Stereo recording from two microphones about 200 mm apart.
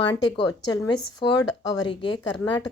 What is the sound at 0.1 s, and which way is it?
Speech, 20° left (ahead or behind).